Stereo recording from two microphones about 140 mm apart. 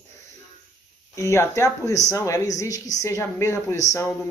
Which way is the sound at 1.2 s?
20° left (ahead or behind).